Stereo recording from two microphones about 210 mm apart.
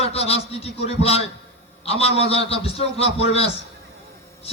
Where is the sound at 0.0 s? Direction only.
30° left (ahead or behind).